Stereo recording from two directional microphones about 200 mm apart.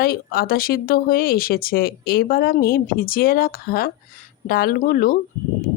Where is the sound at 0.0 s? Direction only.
50° left (ahead or behind).